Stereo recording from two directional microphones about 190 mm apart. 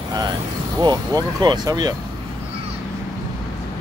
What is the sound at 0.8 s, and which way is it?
Speech, 20° right (ahead or behind).